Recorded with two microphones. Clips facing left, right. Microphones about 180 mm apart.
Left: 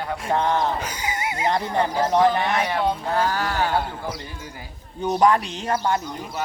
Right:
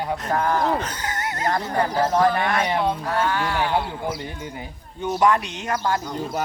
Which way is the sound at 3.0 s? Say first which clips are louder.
Even; 35° left (ahead or behind).